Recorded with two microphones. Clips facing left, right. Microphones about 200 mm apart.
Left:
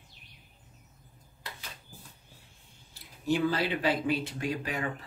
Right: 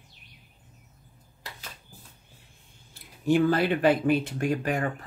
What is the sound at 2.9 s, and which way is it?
Speech, 55° right (ahead or behind).